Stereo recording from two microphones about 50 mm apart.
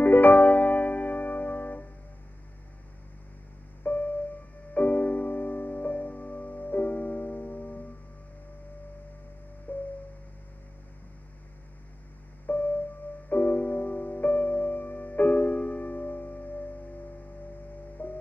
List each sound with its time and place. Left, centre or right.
0.0 s music: left
3.8 s music: left
9.7 s music: left
12.4 s music: left
18.0 s music: left